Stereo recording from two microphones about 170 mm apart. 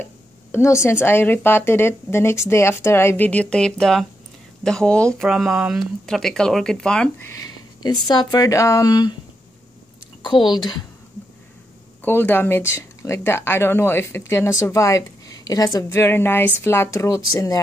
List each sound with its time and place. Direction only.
0.0 s a sound: 15° left (ahead or behind)
0.8 s speech: 15° left (ahead or behind)
7.2 s speech: 20° left (ahead or behind)
10.2 s speech: 25° left (ahead or behind)
12.0 s speech: 10° left (ahead or behind)